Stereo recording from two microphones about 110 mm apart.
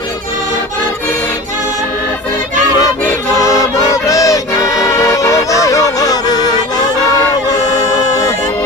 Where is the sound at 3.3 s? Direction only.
30° left (ahead or behind).